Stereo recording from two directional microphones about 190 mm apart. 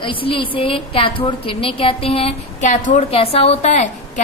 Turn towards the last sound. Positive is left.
turn(degrees=40)  # may be behind; listen again after turning